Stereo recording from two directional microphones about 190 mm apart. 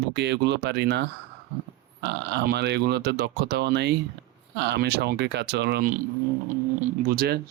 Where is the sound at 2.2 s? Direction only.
65° right (ahead or behind); by 6.0 s 45° right (ahead or behind).